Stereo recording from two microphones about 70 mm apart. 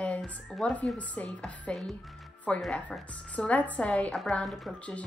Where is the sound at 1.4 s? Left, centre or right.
Centre.